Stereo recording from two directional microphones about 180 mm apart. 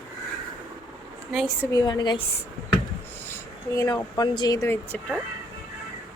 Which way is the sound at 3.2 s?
15° left (ahead or behind).